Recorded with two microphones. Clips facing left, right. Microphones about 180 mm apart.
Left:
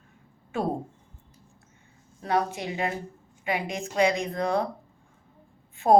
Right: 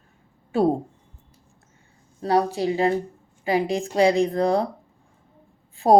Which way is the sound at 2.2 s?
35° right (ahead or behind).